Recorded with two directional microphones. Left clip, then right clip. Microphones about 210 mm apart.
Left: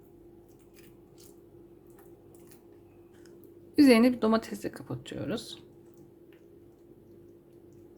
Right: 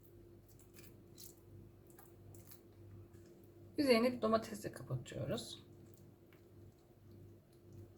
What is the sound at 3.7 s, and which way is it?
A woman's voice, 45° left (ahead or behind).